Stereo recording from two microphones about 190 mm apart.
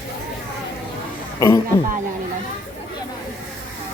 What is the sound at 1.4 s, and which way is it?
Speech, 15° left (ahead or behind).